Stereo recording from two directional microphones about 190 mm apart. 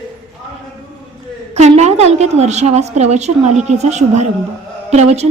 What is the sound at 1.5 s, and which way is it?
A woman's voice, 35° right (ahead or behind).